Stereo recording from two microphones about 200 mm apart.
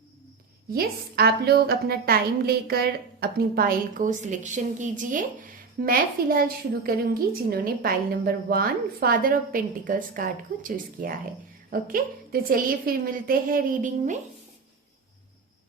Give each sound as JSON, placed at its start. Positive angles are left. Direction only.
{"t": 0.7, "sound": "a woman's voice", "side_deg": -50}